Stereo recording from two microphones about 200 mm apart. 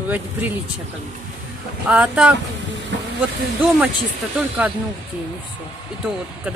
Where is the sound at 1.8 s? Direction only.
5° right (ahead or behind).